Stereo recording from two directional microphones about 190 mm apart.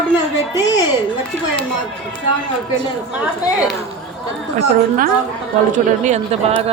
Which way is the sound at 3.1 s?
5° right (ahead or behind).